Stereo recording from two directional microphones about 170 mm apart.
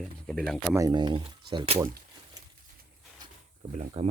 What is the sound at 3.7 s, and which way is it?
Speech, 40° right (ahead or behind).